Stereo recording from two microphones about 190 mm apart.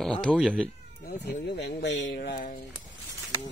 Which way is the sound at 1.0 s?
60° left (ahead or behind).